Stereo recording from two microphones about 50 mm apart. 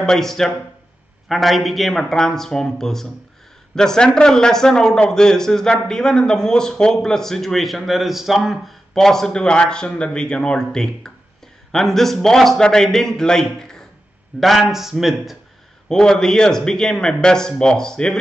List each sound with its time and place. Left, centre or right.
0.0 s a man's voice: centre
8.9 s a man's voice: centre
15.9 s a man's voice: centre